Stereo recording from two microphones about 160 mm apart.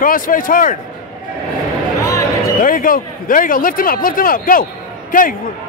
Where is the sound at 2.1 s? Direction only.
20° left (ahead or behind).